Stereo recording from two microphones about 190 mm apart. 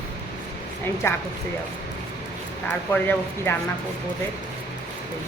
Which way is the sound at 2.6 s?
10° left (ahead or behind).